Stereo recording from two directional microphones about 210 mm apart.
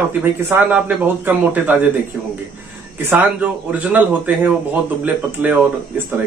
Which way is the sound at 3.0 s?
10° right (ahead or behind).